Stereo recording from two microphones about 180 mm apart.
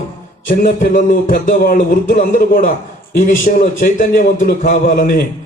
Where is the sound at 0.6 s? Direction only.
45° left (ahead or behind).